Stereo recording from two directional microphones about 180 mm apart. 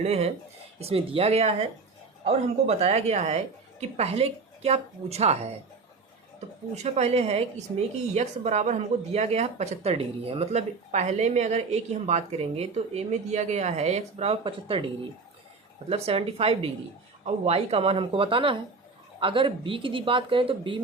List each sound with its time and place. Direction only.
0.0 s speech: 35° right (ahead or behind)
6.8 s speech: 35° right (ahead or behind)
15.9 s speech: 35° right (ahead or behind)